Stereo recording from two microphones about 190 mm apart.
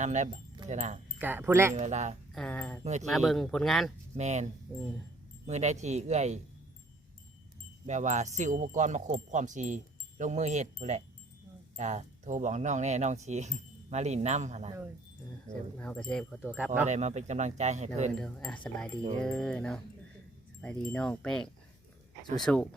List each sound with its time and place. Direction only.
0.0 s speech: 40° right (ahead or behind)
1.2 s speech: 10° right (ahead or behind)
1.7 s speech: 40° right (ahead or behind)
2.3 s speech: 5° left (ahead or behind)
2.8 s speech: 40° right (ahead or behind)
3.1 s speech: centre (ahead or behind)
4.1 s speech: 35° right (ahead or behind)
4.7 s speech: 5° right (ahead or behind)
5.5 s speech: 35° right (ahead or behind)
7.9 s speech: 40° right (ahead or behind)
15.8 s speech: 5° left (ahead or behind)
16.8 s speech: 35° right (ahead or behind)
18.1 s speech: 5° left (ahead or behind)